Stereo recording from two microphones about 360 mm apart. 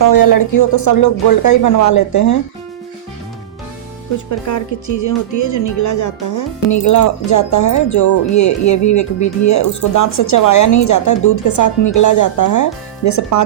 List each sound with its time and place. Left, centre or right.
0.0 s speech: left
4.3 s speech: left